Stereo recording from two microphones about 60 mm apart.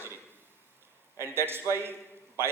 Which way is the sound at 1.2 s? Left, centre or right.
Right.